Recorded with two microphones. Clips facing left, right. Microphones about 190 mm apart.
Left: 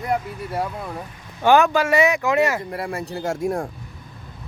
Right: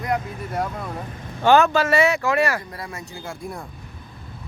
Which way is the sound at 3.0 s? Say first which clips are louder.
Left 9 dB; 65° left (ahead or behind).